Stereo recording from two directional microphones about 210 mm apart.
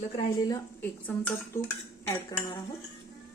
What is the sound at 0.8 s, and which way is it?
Speech, 10° left (ahead or behind).